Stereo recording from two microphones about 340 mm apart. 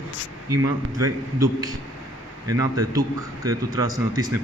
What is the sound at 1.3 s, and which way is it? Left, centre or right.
A man's voice, centre.